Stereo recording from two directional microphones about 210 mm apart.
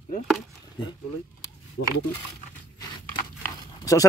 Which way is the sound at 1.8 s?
70° left (ahead or behind).